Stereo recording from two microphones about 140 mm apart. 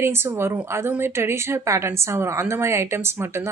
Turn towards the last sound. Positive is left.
turn(degrees=-15)  # may be behind; listen again after turning